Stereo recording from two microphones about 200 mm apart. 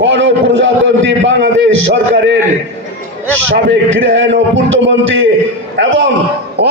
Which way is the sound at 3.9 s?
70° right (ahead or behind).